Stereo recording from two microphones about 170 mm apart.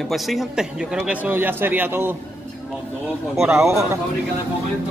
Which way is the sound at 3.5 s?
15° right (ahead or behind).